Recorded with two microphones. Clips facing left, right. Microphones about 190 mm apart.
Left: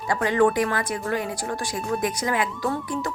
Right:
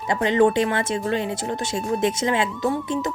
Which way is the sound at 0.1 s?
20° right (ahead or behind).